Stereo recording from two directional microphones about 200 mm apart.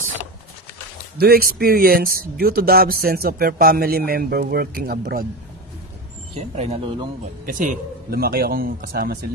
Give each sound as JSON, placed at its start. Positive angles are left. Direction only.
{"t": 1.1, "sound": "speech", "side_deg": -50}
{"t": 6.3, "sound": "speech", "side_deg": -30}